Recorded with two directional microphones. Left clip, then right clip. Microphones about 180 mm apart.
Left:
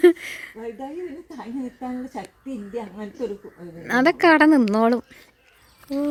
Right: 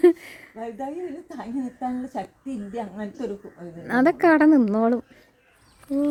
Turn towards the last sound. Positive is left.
turn(degrees=0)  # may be behind; listen again after turning